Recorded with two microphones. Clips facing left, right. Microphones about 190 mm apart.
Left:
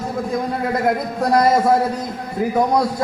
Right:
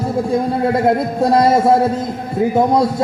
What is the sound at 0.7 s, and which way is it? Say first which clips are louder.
A man's voice: right 3 dB; 25° right (ahead or behind).